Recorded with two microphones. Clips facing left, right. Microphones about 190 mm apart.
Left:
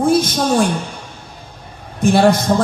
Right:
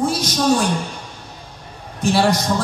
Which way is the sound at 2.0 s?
55° left (ahead or behind).